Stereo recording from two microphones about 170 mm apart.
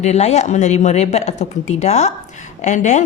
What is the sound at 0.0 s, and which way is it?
A woman's voice, 40° left (ahead or behind).